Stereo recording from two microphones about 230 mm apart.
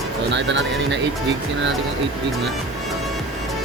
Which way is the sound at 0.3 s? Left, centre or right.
Right.